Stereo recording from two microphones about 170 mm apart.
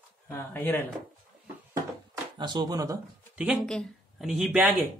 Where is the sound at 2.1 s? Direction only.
25° right (ahead or behind).